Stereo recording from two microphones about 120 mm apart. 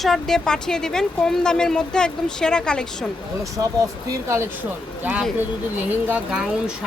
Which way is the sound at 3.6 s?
25° right (ahead or behind).